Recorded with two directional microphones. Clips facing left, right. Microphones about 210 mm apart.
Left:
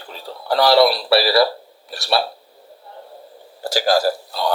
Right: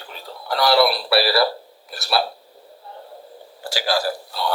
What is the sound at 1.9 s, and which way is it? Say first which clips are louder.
Speech: left 2 dB; centre (ahead or behind).